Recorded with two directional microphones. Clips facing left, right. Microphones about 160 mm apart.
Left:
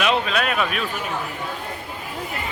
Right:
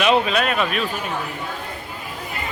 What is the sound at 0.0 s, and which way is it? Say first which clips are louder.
Speech: right 3 dB; centre (ahead or behind).